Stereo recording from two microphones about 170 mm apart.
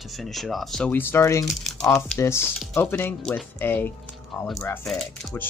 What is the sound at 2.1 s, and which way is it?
Speech, 15° left (ahead or behind).